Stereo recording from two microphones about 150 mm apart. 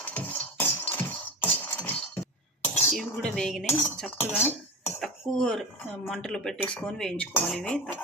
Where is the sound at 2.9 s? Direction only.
5° left (ahead or behind).